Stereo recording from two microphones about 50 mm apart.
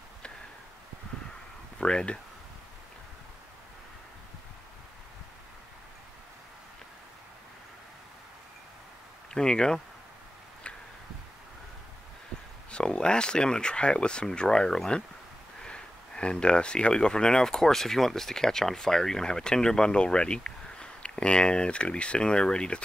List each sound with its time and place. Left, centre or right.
1.8 s speech: centre
9.3 s speech: centre
12.7 s speech: centre